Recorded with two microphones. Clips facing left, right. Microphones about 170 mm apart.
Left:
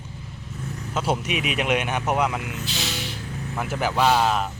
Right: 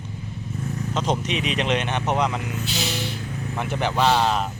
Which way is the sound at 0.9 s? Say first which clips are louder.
Even; 5° left (ahead or behind).